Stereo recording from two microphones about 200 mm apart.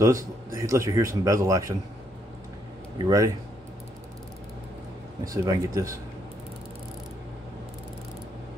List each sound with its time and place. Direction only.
0.0 s a man's voice: 15° right (ahead or behind)
3.0 s a man's voice: 20° right (ahead or behind)
5.2 s a man's voice: 20° right (ahead or behind)